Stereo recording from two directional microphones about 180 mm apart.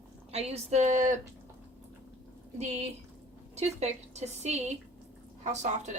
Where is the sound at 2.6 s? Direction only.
40° right (ahead or behind).